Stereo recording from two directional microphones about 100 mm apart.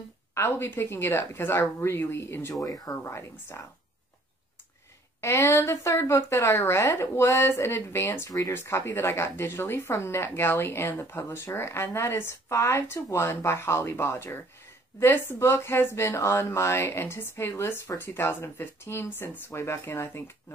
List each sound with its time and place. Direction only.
0.3 s a woman's voice: 25° left (ahead or behind)
2.5 s a woman's voice: 35° left (ahead or behind)
5.2 s a woman's voice: 25° left (ahead or behind)